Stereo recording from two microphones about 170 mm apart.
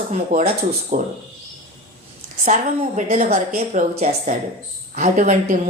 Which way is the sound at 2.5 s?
45° right (ahead or behind).